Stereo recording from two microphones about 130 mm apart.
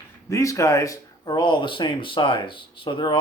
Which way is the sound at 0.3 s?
25° left (ahead or behind).